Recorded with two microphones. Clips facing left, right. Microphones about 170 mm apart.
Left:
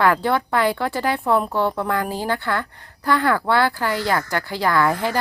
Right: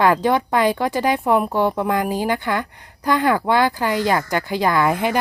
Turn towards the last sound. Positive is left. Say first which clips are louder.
# right 1 dB
turn(degrees=-15)  # may be behind; listen again after turning